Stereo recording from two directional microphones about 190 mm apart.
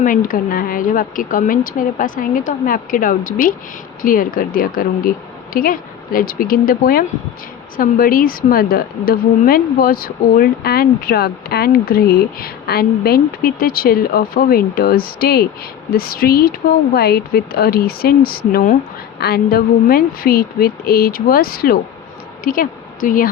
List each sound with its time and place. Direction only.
0.0 s a woman's voice: 45° left (ahead or behind)